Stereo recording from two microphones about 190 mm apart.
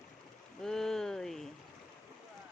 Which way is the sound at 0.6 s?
5° left (ahead or behind).